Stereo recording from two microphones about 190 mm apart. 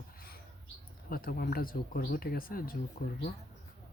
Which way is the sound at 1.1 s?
50° left (ahead or behind).